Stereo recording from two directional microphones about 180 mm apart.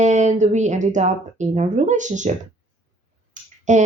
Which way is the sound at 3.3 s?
40° right (ahead or behind).